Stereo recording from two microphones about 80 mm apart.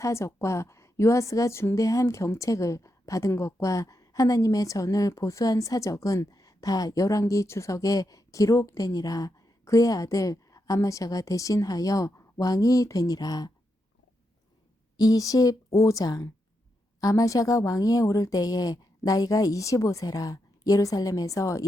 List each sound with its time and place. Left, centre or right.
0.0 s a woman's voice: left
14.9 s a woman's voice: left